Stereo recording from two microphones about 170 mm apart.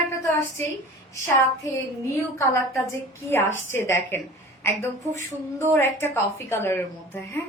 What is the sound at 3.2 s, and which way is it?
A woman's voice, 15° left (ahead or behind).